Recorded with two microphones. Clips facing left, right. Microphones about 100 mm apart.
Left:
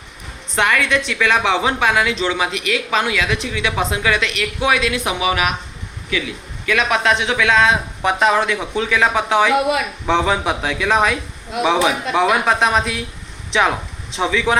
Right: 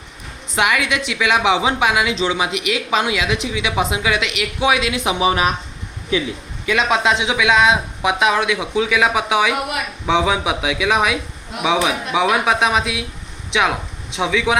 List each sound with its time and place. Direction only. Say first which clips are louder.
0.5 s a woman's voice: left 1 dB; 10° right (ahead or behind)
5.2 s speech: right 3 dB; 30° right (ahead or behind)
6.7 s a woman's voice: even; 20° right (ahead or behind)
8.0 s speech: left 1 dB; 5° right (ahead or behind)